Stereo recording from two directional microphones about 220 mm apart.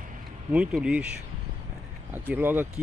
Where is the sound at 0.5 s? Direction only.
5° right (ahead or behind).